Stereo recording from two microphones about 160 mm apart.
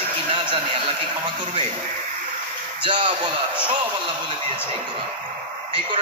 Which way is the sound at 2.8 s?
30° right (ahead or behind).